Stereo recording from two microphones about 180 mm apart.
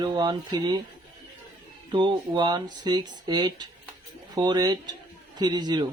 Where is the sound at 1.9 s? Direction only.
25° right (ahead or behind).